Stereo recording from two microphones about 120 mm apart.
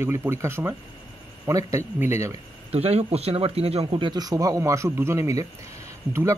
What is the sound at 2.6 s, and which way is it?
Speech, 60° right (ahead or behind).